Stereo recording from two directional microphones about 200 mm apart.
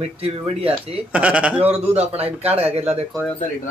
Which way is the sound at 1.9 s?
30° right (ahead or behind).